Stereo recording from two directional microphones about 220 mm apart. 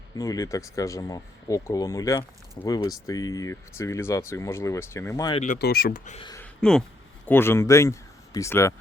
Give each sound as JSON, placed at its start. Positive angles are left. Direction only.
{"t": 0.2, "sound": "speech", "side_deg": 15}
{"t": 5.4, "sound": "speech", "side_deg": 40}
{"t": 6.1, "sound": "speech", "side_deg": 20}
{"t": 6.4, "sound": "a sound", "side_deg": 5}
{"t": 7.3, "sound": "speech", "side_deg": 10}